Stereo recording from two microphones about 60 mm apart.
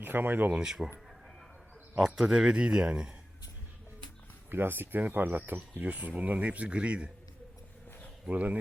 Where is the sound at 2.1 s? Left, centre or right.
Centre.